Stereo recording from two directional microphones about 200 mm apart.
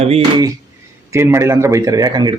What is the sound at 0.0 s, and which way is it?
Speech, 30° right (ahead or behind).